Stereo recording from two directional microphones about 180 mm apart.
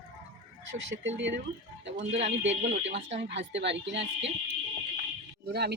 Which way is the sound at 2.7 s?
90° right.